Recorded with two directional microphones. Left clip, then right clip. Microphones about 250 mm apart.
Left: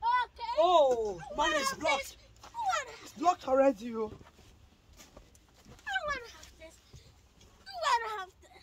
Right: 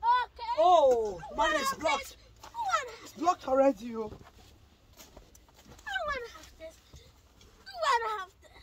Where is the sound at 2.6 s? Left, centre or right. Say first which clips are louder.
Right 2 dB; centre.